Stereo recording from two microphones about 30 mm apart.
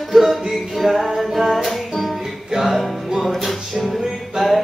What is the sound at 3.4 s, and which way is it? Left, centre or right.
Music, centre.